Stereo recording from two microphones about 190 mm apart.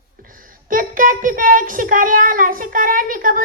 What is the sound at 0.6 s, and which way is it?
A child's voice, 45° right (ahead or behind).